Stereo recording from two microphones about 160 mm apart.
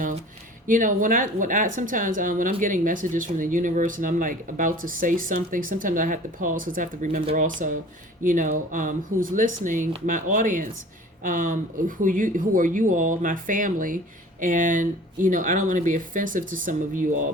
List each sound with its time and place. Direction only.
0.7 s a woman's voice: 55° right (ahead or behind)